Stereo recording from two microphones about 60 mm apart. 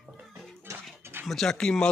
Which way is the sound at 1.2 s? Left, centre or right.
Centre.